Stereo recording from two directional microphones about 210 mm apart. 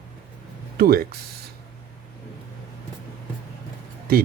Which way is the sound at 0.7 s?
45° right (ahead or behind).